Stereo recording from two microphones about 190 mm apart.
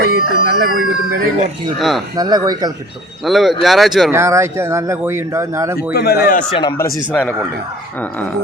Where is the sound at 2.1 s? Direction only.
20° right (ahead or behind).